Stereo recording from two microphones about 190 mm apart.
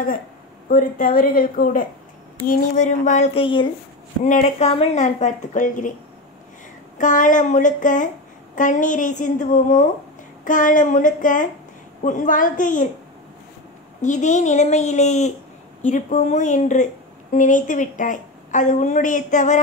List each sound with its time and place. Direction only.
0.7 s a woman's voice: 50° left (ahead or behind); by 3.6 s 25° left (ahead or behind)
4.2 s a woman's voice: 40° left (ahead or behind)
7.0 s a woman's voice: 40° left (ahead or behind)
14.0 s a woman's voice: 40° left (ahead or behind)